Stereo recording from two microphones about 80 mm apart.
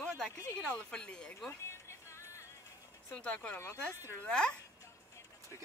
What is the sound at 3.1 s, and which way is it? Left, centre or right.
Speech, centre.